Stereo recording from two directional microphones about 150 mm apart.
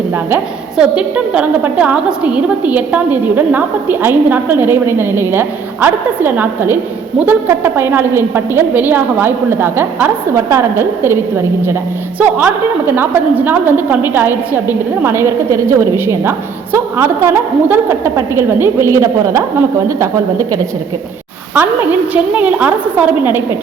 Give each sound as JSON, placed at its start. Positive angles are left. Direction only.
{"t": 0.3, "sound": "a woman's voice", "side_deg": -10}